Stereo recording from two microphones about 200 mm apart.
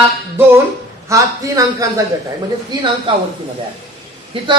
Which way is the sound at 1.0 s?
15° right (ahead or behind).